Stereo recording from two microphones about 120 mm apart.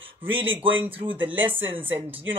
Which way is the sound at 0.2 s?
15° right (ahead or behind).